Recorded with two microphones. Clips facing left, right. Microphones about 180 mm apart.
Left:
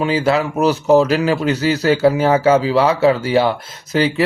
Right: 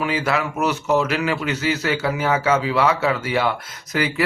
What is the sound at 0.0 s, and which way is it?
Speech, 30° left (ahead or behind).